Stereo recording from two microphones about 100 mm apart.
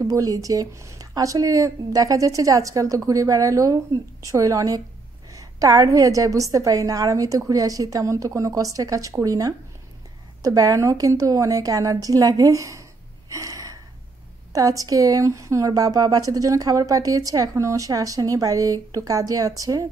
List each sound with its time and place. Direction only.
0.0 s speech: 35° right (ahead or behind)
13.3 s gasp: 35° right (ahead or behind)
14.5 s speech: 35° right (ahead or behind)